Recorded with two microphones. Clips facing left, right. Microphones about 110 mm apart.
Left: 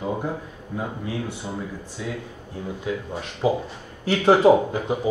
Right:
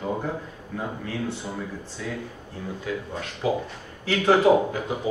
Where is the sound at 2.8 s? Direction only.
20° left (ahead or behind).